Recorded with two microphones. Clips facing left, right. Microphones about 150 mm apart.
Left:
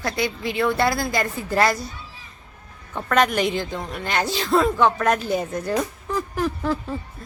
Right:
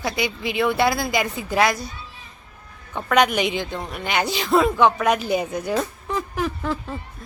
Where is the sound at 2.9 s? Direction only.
Centre (ahead or behind).